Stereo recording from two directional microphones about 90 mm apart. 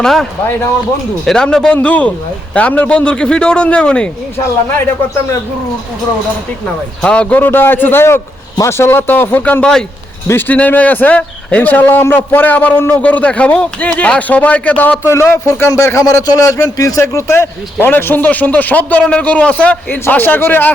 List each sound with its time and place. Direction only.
0.0 s speech: centre (ahead or behind)
7.0 s speech: 10° left (ahead or behind)
10.2 s speech: 25° left (ahead or behind)
15.1 s speech: 30° left (ahead or behind)